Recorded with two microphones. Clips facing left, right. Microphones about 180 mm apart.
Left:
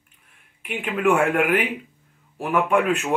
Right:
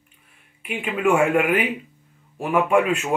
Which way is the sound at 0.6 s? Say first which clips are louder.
Even; centre (ahead or behind).